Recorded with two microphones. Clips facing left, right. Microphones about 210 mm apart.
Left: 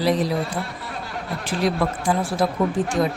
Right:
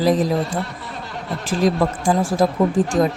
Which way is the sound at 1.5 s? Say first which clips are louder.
Right 4 dB; 45° right (ahead or behind).